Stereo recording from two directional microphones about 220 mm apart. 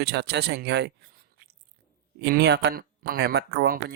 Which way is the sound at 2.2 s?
50° right (ahead or behind).